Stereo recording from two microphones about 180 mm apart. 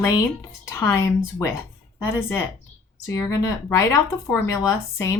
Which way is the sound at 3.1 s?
15° left (ahead or behind).